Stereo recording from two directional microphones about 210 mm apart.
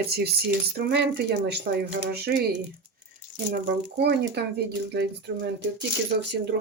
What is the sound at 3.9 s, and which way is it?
Speech, 50° right (ahead or behind).